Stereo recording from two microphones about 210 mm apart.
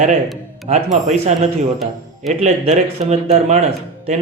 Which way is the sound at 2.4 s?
30° right (ahead or behind).